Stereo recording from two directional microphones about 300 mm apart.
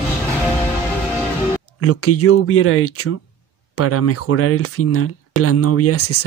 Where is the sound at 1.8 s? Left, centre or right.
Left.